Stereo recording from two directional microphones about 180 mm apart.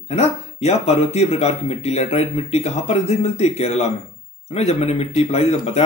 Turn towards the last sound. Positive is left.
turn(degrees=35)  # may be behind; listen again after turning